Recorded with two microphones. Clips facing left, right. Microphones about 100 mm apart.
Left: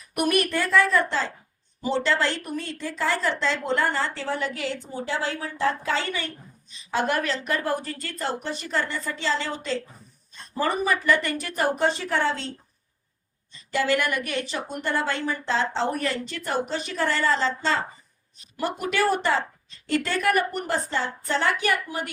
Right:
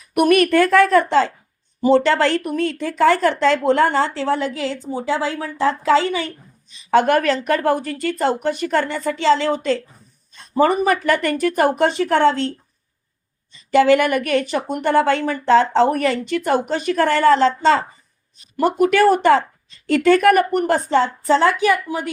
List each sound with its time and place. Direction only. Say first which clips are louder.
0.1 s speech: right 9 dB; 70° right (ahead or behind)
1.8 s speech: right 9 dB; 60° right (ahead or behind); by 6.2 s 90° right
6.9 s a woman's voice: right 10 dB; 65° right (ahead or behind)
13.7 s a woman's voice: right 10 dB; 65° right (ahead or behind); by 17.7 s 80° right
18.5 s a woman's voice: right 11 dB; 55° right (ahead or behind)
20.9 s speech: right 11 dB; 90° right